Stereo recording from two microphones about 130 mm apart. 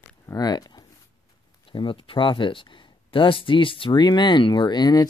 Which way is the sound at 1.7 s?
40° left (ahead or behind).